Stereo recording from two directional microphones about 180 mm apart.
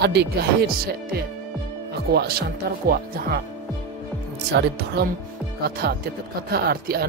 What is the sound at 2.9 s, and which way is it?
Speech, 55° right (ahead or behind).